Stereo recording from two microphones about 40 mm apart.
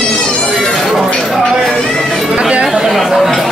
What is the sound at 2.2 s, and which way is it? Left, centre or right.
Chatter, right.